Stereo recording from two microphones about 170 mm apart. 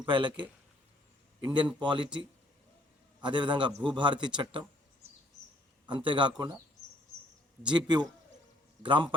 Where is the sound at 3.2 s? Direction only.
25° right (ahead or behind).